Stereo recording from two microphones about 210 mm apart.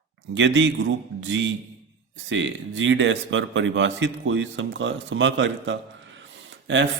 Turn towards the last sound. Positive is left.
turn(degrees=-60)  # may be behind; listen again after turning